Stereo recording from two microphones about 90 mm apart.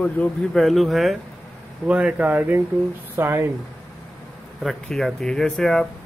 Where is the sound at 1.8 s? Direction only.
15° right (ahead or behind).